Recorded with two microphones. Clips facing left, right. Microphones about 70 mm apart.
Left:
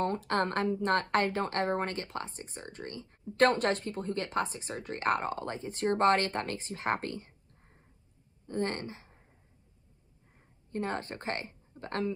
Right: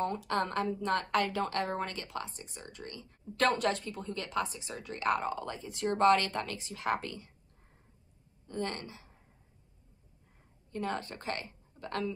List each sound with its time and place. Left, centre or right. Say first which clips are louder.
0.0 s speech: left 2 dB; left
8.5 s speech: left 4 dB; left
10.7 s speech: left 1 dB; left